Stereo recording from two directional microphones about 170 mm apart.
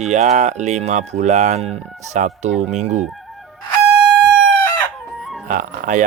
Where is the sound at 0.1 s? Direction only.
45° right (ahead or behind).